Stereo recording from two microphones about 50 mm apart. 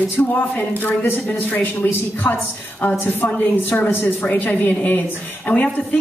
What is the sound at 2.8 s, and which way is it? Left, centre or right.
A woman's voice, left.